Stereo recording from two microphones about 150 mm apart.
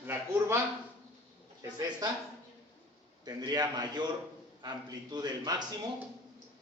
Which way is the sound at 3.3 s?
25° right (ahead or behind).